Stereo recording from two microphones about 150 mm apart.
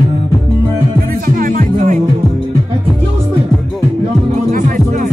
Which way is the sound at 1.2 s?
65° right (ahead or behind).